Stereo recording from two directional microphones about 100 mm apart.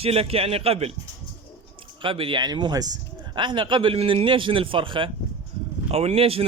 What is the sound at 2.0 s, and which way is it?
Speech, 60° right (ahead or behind).